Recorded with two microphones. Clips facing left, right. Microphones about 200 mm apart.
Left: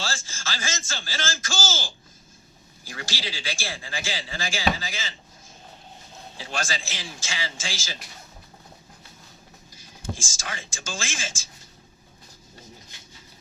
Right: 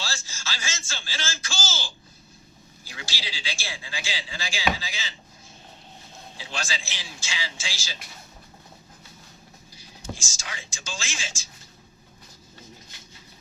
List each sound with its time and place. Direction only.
0.0 s a sound: 50° left (ahead or behind)
2.8 s a man's voice: 50° left (ahead or behind)
6.3 s a man's voice: 50° left (ahead or behind)
9.7 s speech: 50° left (ahead or behind)